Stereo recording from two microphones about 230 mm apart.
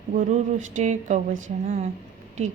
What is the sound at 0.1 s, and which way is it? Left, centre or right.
Speech, right.